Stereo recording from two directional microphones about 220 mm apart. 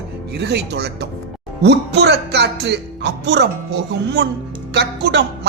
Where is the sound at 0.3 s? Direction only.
50° right (ahead or behind).